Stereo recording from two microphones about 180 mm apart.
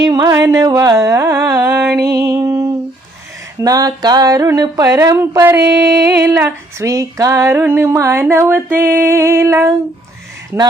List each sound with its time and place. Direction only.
0.0 s female singing: 20° right (ahead or behind)
3.6 s a sound: 20° right (ahead or behind)
5.6 s music: 65° right (ahead or behind)
6.1 s female singing: 15° right (ahead or behind)